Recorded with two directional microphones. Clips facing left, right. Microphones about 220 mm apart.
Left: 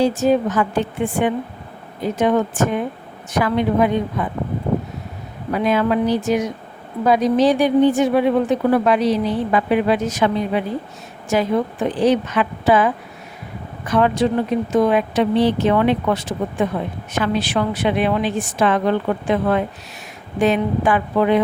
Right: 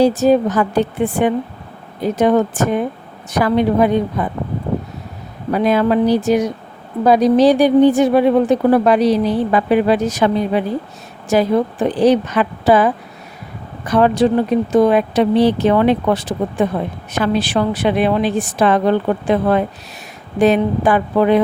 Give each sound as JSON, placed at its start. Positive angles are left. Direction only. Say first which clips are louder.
{"t": 0.0, "sound": "a woman's voice", "louder": "right 4 dB", "side_deg": -35}
{"t": 5.5, "sound": "a woman's voice", "louder": "right 3 dB", "side_deg": -35}